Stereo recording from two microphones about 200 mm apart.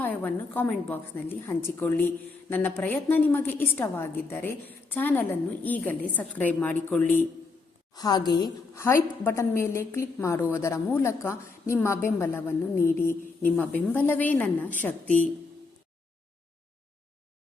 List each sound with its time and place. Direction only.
0.0 s a woman's voice: 10° left (ahead or behind)
7.9 s a woman's voice: 20° left (ahead or behind)